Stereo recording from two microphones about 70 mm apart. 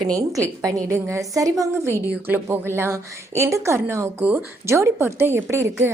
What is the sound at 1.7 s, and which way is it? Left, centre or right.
Speech, right.